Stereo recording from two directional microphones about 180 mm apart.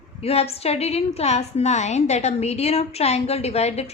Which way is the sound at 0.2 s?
35° left (ahead or behind).